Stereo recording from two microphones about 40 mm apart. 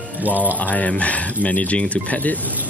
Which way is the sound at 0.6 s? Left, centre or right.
Left.